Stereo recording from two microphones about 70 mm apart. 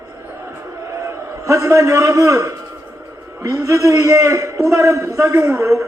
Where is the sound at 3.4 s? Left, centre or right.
Right.